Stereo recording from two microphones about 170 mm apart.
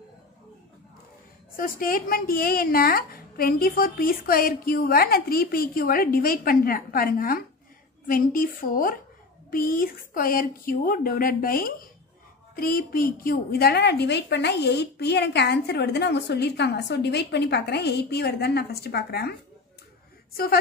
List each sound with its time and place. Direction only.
1.6 s a woman's voice: 55° left (ahead or behind)